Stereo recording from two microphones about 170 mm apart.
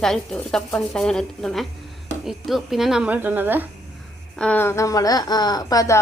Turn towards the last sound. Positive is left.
turn(degrees=20)  # may be behind; listen again after turning